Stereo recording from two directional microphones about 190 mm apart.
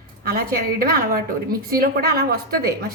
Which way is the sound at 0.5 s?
50° right (ahead or behind).